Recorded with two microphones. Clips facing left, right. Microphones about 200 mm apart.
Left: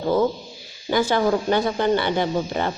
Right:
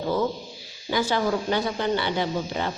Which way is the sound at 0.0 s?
50° left (ahead or behind).